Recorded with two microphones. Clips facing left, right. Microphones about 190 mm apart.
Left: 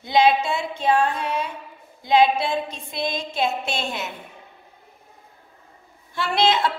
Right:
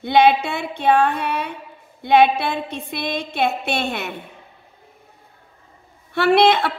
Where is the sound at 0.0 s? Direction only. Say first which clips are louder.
Right 3 dB; 60° right (ahead or behind).